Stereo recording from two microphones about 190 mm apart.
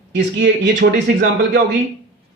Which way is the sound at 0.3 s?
70° right (ahead or behind).